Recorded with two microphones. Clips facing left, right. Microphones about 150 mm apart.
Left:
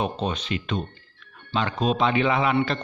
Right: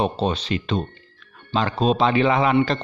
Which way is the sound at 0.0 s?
30° right (ahead or behind).